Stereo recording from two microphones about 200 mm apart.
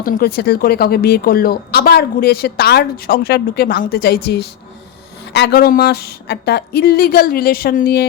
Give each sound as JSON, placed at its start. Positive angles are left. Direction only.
{"t": 0.0, "sound": "speech", "side_deg": 45}